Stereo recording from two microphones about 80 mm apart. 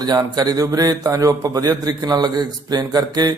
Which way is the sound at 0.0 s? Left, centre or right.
Right.